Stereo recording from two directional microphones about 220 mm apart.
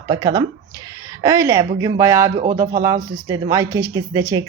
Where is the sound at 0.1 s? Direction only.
15° right (ahead or behind).